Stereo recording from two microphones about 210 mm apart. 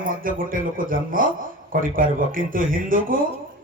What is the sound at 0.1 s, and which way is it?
Speech, 40° right (ahead or behind).